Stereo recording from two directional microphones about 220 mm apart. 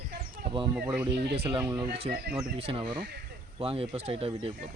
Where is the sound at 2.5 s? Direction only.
25° right (ahead or behind).